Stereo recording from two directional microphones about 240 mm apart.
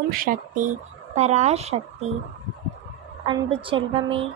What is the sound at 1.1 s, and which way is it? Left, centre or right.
Speech, right.